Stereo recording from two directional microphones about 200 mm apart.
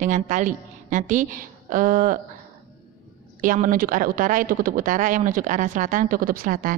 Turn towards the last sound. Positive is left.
turn(degrees=-45)  # may be behind; listen again after turning